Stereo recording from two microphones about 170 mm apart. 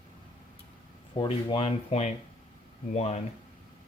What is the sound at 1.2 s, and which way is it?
Speech, 30° left (ahead or behind).